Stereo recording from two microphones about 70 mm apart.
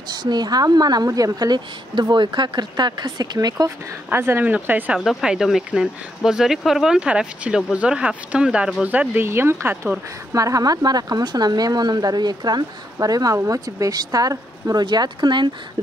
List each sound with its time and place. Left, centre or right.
0.1 s speech: right
2.0 s speech: right
4.1 s speech: right
4.9 s speech: centre; by 9.8 s right
10.3 s speech: right